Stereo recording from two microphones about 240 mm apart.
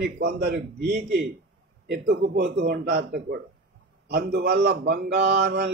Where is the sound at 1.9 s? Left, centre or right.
Right.